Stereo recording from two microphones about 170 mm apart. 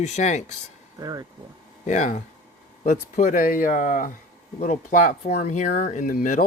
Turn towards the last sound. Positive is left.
turn(degrees=50)  # may be behind; listen again after turning